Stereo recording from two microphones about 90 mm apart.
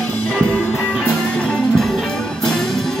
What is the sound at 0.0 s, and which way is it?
Music, 10° left (ahead or behind).